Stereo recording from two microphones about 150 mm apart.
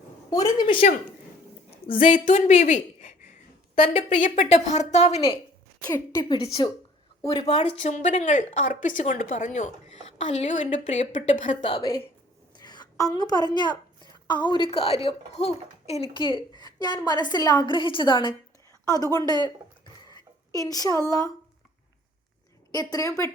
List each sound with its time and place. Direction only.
0.3 s a woman's voice: 25° left (ahead or behind)
1.9 s a woman's voice: 60° left (ahead or behind); by 5.4 s 45° left (ahead or behind)
5.9 s a woman's voice: 25° left (ahead or behind)
7.3 s speech: 40° left (ahead or behind); by 11.5 s 55° left (ahead or behind)
11.6 s a woman's voice: 25° left (ahead or behind)
20.6 s a woman's voice: 25° left (ahead or behind)
22.7 s a woman's voice: 25° left (ahead or behind)